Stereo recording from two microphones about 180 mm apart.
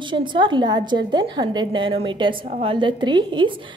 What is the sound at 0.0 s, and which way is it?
A woman's voice, 25° right (ahead or behind).